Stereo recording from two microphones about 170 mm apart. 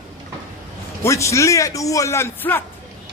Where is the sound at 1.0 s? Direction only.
15° left (ahead or behind).